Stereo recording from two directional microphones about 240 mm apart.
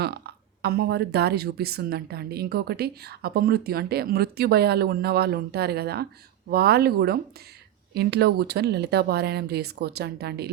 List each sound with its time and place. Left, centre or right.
0.0 s speech: right